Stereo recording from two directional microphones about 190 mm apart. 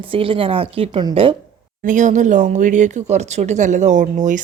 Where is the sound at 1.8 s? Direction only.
45° right (ahead or behind).